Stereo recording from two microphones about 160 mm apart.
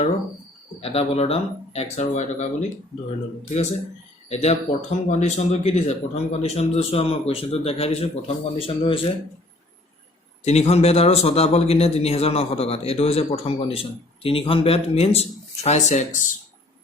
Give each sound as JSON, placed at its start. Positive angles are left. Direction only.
{"t": 0.8, "sound": "a man's voice", "side_deg": 40}
{"t": 10.4, "sound": "a man's voice", "side_deg": 40}